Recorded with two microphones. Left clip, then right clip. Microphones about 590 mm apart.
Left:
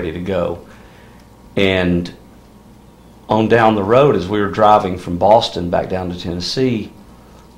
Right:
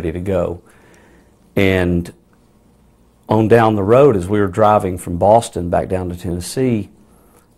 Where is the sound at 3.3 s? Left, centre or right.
Right.